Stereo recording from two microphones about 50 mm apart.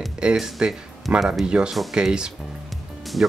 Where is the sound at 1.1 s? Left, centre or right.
Right.